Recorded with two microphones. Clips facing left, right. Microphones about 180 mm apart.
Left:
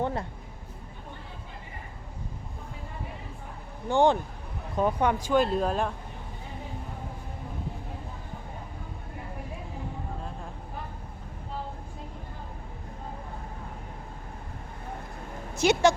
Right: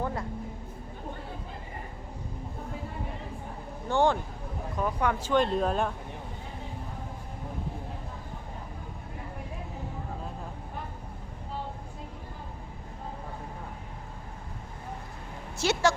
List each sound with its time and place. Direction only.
0.0 s speech: 25° left (ahead or behind)
3.8 s speech: 15° left (ahead or behind)
5.3 s speech: 5° left (ahead or behind)
15.5 s speech: 15° left (ahead or behind)